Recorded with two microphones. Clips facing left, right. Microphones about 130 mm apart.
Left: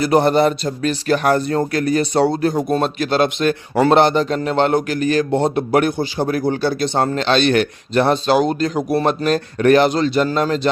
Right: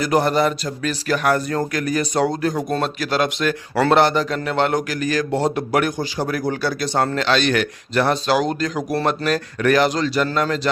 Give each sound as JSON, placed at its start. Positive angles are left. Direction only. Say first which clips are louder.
{"t": 0.0, "sound": "a man's voice", "louder": "left 4 dB", "side_deg": 25}
{"t": 8.9, "sound": "speech", "louder": "left 3 dB", "side_deg": 15}
{"t": 9.2, "sound": "a man's voice", "louder": "left 4 dB", "side_deg": 25}